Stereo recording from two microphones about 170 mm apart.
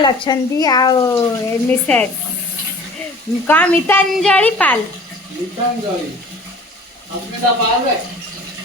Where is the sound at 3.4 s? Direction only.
10° left (ahead or behind).